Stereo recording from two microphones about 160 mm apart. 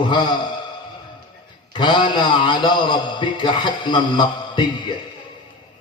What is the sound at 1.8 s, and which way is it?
A man's voice, 30° left (ahead or behind).